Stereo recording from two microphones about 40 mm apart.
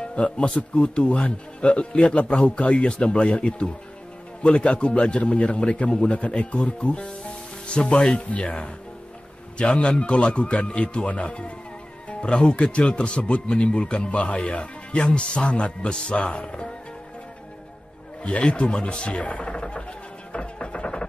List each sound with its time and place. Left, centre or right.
0.0 s speech: left
18.2 s speech: left
20.3 s music: left